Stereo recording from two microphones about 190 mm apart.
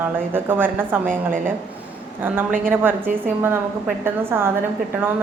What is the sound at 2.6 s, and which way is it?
A woman's voice, 10° right (ahead or behind).